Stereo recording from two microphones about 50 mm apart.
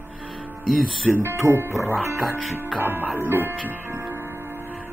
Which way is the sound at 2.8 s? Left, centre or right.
Right.